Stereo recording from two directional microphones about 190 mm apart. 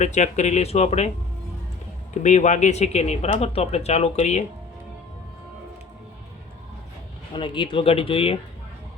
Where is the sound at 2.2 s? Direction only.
40° left (ahead or behind).